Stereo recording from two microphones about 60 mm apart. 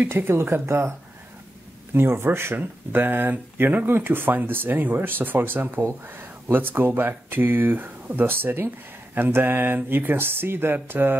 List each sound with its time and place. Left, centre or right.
0.1 s speech: right
2.0 s speech: right